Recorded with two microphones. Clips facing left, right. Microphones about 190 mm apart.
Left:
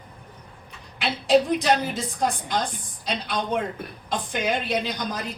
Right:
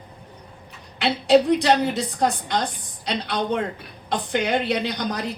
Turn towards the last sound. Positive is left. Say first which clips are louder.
# right 2 dB
turn(degrees=-65)  # may be behind; listen again after turning